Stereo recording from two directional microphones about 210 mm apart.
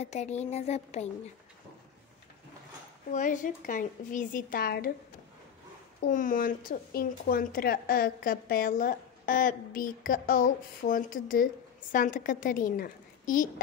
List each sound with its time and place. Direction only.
0.0 s a woman's voice: 30° left (ahead or behind)
3.1 s a woman's voice: 35° left (ahead or behind)
6.0 s a woman's voice: 40° left (ahead or behind)